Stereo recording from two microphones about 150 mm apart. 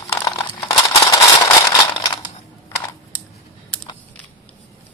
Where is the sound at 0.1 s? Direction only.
20° left (ahead or behind).